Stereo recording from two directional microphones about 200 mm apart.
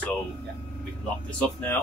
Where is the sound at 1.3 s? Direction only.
5° left (ahead or behind).